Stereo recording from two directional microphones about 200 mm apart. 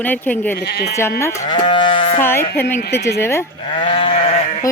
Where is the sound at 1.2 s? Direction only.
15° left (ahead or behind).